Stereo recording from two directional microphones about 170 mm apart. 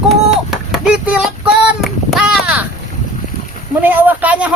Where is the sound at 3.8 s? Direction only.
10° right (ahead or behind).